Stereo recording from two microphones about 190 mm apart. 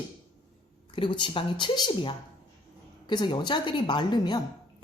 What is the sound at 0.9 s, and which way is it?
Speech, 25° left (ahead or behind).